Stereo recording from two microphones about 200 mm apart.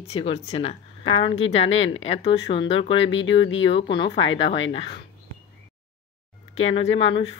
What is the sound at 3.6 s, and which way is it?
Speech, 25° left (ahead or behind).